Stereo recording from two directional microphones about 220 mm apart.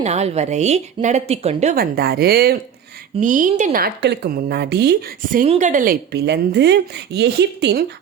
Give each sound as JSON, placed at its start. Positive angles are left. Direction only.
{"t": 0.0, "sound": "a woman's voice", "side_deg": -30}